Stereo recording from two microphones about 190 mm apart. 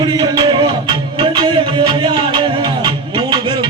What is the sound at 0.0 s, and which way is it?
Music, 20° right (ahead or behind).